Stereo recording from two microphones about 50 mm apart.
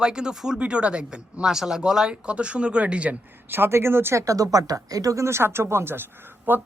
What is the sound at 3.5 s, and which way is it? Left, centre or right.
Speech, right.